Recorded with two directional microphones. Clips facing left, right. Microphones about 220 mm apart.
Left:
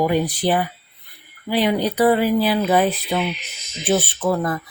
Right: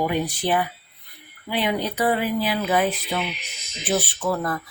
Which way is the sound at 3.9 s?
25° left (ahead or behind).